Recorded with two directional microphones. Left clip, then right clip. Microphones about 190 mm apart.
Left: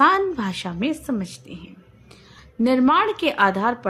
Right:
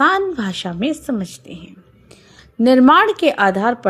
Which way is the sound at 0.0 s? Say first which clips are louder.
Right 2 dB; 15° right (ahead or behind).